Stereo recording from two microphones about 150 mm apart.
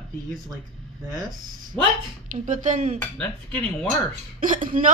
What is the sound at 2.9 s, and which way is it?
Speech, 10° left (ahead or behind).